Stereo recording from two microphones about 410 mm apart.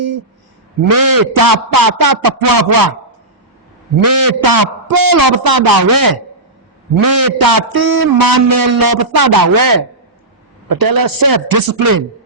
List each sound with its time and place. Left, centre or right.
0.9 s a man's voice: right
4.0 s a man's voice: right